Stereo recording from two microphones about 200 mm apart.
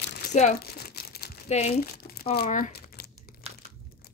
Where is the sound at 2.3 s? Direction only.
45° left (ahead or behind).